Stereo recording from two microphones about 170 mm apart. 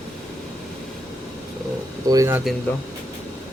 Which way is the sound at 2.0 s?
20° right (ahead or behind).